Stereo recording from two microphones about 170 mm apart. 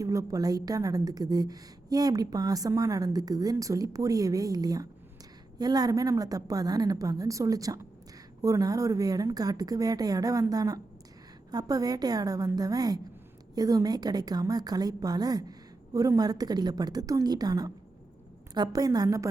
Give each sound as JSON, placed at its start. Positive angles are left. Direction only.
{"t": 0.0, "sound": "a woman's voice", "side_deg": -20}